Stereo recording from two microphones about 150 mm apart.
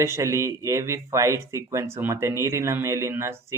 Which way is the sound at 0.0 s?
20° right (ahead or behind).